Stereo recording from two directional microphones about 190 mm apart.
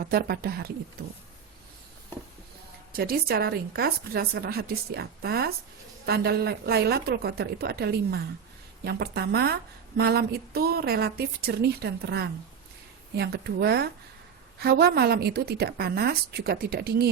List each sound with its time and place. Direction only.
0.0 s speech: 55° right (ahead or behind)
2.9 s a woman's voice: 55° right (ahead or behind)